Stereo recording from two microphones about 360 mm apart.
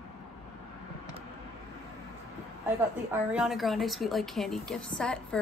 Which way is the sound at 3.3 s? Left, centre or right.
Centre.